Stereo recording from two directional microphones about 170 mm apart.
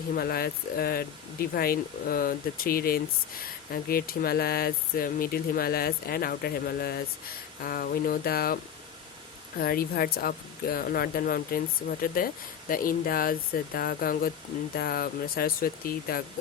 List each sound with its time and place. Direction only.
0.1 s speech: 65° left (ahead or behind)
9.6 s speech: 60° left (ahead or behind)